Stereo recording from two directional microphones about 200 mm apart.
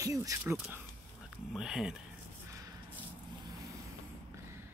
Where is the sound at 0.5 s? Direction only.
Centre (ahead or behind).